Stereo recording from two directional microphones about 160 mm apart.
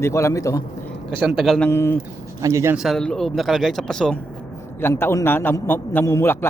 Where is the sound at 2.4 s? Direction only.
20° right (ahead or behind).